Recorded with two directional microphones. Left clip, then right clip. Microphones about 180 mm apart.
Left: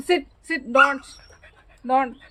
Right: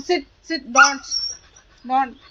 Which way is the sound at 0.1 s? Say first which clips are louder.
Even; 35° left (ahead or behind).